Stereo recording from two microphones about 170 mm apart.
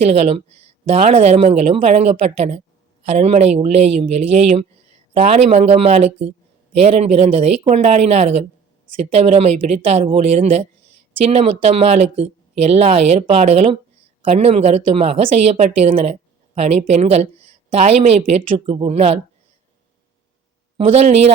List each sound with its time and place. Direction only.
0.0 s speech: 40° right (ahead or behind)
20.7 s speech: 40° right (ahead or behind)